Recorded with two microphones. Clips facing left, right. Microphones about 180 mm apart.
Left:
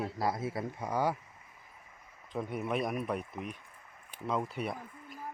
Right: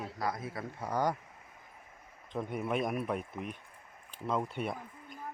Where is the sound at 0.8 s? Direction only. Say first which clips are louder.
Even; 10° left (ahead or behind).